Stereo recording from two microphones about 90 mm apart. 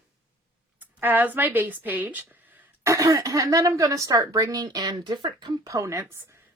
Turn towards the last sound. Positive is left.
turn(degrees=-35)  # may be behind; listen again after turning